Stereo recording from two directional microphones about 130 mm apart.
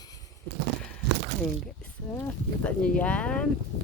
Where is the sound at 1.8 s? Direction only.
15° left (ahead or behind).